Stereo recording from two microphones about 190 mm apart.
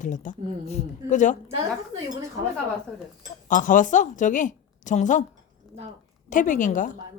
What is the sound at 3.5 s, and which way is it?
Speech, 45° left (ahead or behind).